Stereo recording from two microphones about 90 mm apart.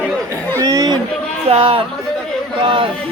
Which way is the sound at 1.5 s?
90° right.